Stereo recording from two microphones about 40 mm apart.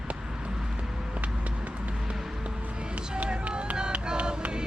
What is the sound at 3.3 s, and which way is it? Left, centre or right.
Run, right.